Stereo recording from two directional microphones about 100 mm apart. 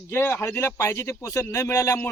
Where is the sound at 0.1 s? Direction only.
20° left (ahead or behind).